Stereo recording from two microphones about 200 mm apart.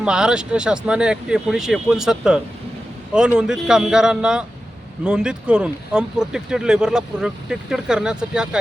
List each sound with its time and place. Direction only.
0.0 s speech: 5° right (ahead or behind)